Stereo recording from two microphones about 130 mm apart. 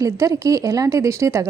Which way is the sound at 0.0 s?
25° right (ahead or behind).